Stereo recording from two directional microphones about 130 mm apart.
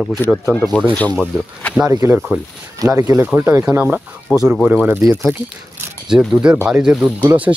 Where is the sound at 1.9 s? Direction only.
20° right (ahead or behind).